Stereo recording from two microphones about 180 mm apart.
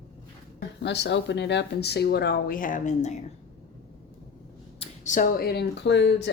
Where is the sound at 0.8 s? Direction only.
75° left (ahead or behind); by 3.2 s 40° left (ahead or behind).